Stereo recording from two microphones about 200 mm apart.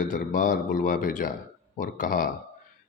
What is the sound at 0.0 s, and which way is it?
A man's voice, 40° left (ahead or behind).